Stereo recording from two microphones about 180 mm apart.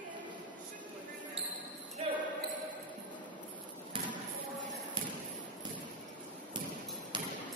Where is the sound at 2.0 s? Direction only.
35° right (ahead or behind).